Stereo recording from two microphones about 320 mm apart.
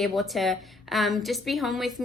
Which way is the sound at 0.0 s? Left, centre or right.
Centre.